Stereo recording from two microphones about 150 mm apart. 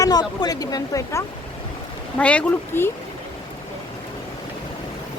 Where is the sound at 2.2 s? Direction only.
10° left (ahead or behind).